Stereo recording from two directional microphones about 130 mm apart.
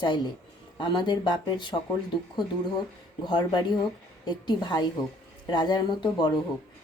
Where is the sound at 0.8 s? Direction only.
35° left (ahead or behind).